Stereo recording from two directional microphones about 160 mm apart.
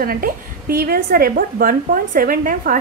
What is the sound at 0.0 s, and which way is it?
A woman's voice, 65° right (ahead or behind).